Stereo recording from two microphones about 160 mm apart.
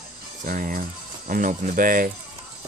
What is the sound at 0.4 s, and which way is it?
Speech, 55° right (ahead or behind).